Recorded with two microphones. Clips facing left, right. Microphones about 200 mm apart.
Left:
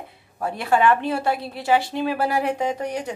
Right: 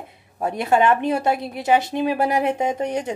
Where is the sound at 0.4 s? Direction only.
20° right (ahead or behind).